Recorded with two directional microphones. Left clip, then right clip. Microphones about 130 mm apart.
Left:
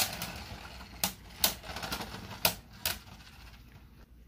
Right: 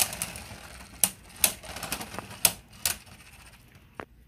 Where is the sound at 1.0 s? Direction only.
5° right (ahead or behind).